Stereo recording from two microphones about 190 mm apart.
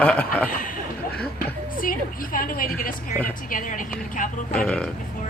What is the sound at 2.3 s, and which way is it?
Speech, 50° left (ahead or behind).